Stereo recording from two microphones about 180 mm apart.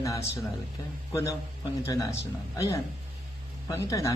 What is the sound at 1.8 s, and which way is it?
Speech, 15° left (ahead or behind).